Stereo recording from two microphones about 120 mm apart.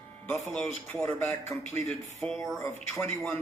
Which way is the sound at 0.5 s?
5° left (ahead or behind).